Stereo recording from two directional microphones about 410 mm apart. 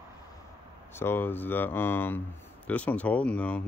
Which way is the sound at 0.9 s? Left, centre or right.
Centre.